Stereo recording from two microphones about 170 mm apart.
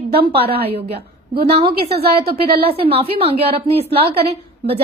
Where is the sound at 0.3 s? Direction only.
35° right (ahead or behind).